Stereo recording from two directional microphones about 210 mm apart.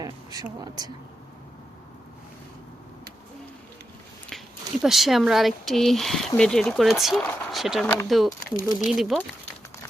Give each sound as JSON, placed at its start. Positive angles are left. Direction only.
{"t": 0.0, "sound": "speech", "side_deg": -15}
{"t": 4.3, "sound": "speech", "side_deg": 0}